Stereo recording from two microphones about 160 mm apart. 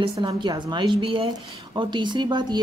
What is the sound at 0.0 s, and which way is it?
Speech, 30° right (ahead or behind).